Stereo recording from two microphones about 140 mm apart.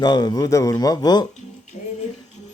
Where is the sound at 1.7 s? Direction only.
60° left (ahead or behind).